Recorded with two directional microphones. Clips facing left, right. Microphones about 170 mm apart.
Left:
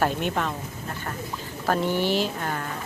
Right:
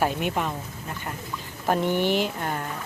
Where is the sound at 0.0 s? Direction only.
10° right (ahead or behind).